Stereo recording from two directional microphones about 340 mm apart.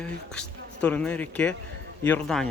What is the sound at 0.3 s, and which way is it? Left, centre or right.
Speech, centre.